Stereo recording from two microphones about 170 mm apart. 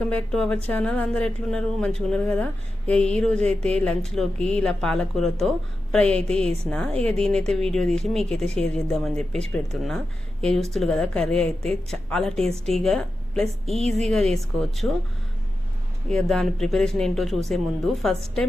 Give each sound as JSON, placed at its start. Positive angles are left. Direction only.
{"t": 0.1, "sound": "a woman's voice", "side_deg": 5}
{"t": 3.3, "sound": "speech", "side_deg": -40}
{"t": 3.7, "sound": "a woman's voice", "side_deg": 5}
{"t": 16.0, "sound": "a woman's voice", "side_deg": 5}